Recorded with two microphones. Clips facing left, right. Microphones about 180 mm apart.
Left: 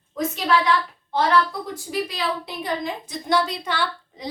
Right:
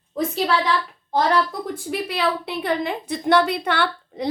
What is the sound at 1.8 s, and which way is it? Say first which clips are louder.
A woman's voice: right 3 dB; 60° right (ahead or behind).